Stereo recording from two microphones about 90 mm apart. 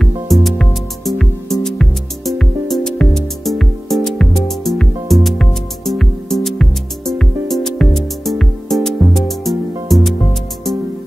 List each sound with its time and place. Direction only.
0.0 s music: centre (ahead or behind)